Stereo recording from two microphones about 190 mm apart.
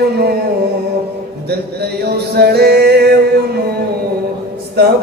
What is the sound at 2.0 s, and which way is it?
Mantra, 55° right (ahead or behind).